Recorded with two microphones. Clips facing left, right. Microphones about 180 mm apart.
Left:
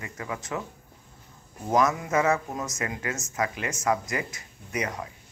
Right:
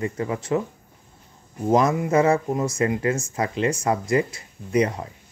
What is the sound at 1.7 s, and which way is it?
Speech, 30° right (ahead or behind).